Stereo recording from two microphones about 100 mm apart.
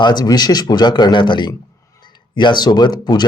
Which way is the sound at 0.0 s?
50° left (ahead or behind).